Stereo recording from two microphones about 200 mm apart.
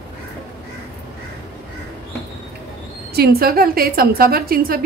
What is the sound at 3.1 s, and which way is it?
A woman's voice, 50° right (ahead or behind).